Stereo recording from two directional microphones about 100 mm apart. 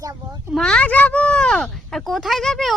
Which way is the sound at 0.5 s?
5° left (ahead or behind).